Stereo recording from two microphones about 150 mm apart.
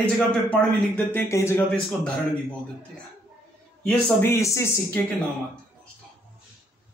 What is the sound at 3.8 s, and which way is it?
Speech, 10° left (ahead or behind).